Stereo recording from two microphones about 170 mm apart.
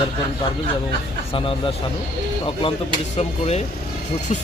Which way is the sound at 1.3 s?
30° left (ahead or behind).